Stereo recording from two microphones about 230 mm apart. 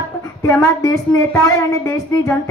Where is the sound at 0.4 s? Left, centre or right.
Centre.